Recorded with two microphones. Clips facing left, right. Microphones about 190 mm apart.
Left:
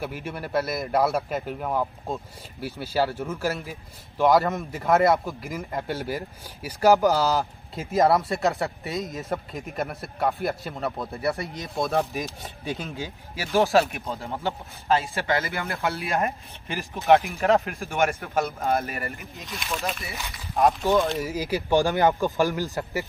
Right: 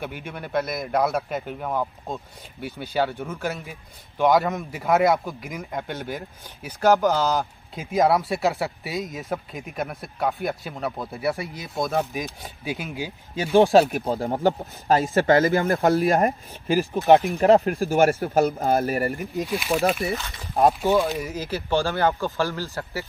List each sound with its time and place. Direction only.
0.0 s a man's voice: centre (ahead or behind)
13.6 s speech: 30° right (ahead or behind)
19.4 s speech: 10° right (ahead or behind)
19.7 s speech: 55° right (ahead or behind)
20.8 s a man's voice: 5° right (ahead or behind)
21.3 s speech: 10° left (ahead or behind)